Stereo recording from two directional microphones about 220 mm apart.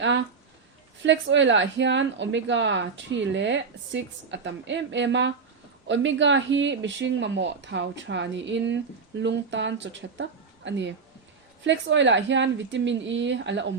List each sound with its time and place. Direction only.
0.0 s a woman's voice: 55° right (ahead or behind)